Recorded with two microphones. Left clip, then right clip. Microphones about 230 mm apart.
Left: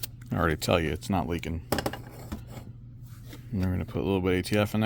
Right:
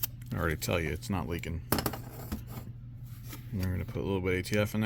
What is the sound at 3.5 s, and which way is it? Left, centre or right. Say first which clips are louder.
Speech: left 6 dB; left.